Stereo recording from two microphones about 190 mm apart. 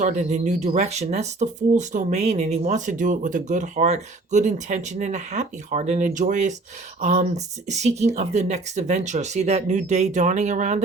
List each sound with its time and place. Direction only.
0.0 s speech: 40° right (ahead or behind)